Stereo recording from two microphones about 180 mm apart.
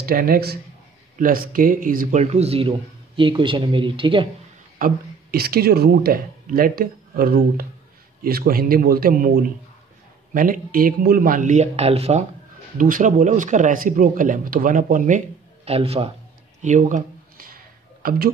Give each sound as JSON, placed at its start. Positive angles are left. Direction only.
{"t": 0.0, "sound": "a man's voice", "side_deg": -55}
{"t": 4.7, "sound": "a man's voice", "side_deg": -55}
{"t": 12.7, "sound": "speech", "side_deg": -50}
{"t": 16.6, "sound": "a sound", "side_deg": -45}
{"t": 18.0, "sound": "a man's voice", "side_deg": -55}